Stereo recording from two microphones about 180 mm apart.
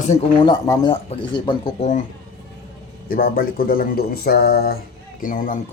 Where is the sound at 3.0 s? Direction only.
55° left (ahead or behind).